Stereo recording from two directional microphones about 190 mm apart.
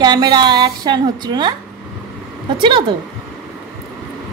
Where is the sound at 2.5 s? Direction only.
25° right (ahead or behind).